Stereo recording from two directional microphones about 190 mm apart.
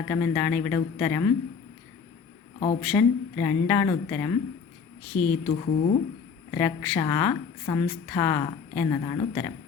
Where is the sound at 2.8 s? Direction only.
5° left (ahead or behind).